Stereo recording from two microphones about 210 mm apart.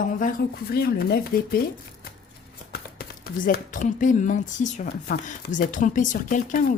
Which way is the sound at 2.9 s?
45° left (ahead or behind).